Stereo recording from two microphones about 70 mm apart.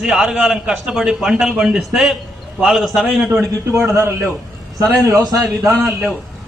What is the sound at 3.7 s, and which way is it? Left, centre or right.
Speech, right.